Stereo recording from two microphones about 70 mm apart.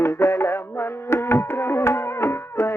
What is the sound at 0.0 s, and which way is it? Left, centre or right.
Music, left.